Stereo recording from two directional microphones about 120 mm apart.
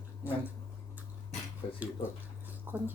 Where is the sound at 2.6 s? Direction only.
15° right (ahead or behind).